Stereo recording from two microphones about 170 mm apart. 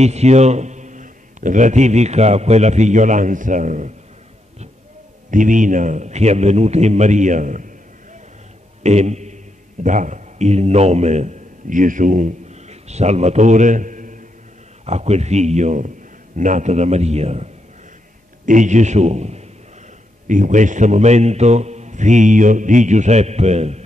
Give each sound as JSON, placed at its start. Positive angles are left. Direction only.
{"t": 0.0, "sound": "a man's voice", "side_deg": -40}
{"t": 5.3, "sound": "a man's voice", "side_deg": -50}
{"t": 8.8, "sound": "a sound", "side_deg": -40}
{"t": 9.8, "sound": "a man's voice", "side_deg": -45}